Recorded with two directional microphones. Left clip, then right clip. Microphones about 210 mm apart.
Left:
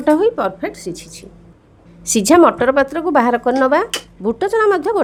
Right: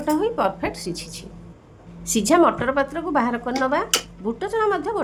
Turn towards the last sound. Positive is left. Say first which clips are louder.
# left 7 dB
turn(degrees=40)  # may be behind; listen again after turning